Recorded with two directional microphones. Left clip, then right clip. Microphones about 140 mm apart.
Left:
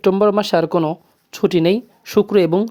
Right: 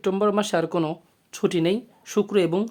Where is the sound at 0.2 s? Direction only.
40° left (ahead or behind).